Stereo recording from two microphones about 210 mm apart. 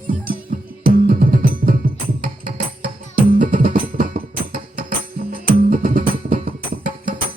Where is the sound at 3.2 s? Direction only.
40° right (ahead or behind).